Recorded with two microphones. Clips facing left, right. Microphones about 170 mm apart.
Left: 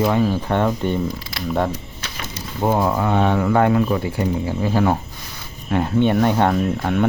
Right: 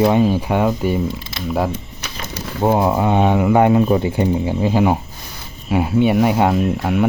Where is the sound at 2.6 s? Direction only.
15° right (ahead or behind).